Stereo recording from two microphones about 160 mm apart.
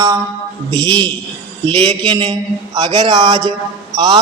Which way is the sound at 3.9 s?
25° right (ahead or behind).